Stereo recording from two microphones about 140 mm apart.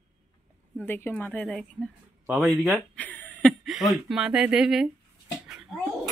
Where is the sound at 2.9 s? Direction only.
10° left (ahead or behind).